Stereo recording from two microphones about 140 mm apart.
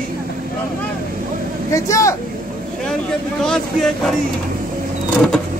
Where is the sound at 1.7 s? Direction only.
20° left (ahead or behind).